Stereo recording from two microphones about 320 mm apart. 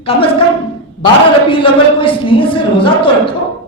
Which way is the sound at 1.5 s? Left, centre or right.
Centre.